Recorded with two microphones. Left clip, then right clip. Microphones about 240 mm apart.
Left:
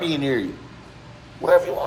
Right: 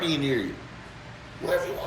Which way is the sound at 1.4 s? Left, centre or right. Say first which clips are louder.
Left 10 dB; centre.